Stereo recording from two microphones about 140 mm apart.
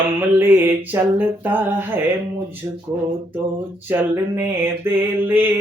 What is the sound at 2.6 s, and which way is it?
Speech, 25° right (ahead or behind).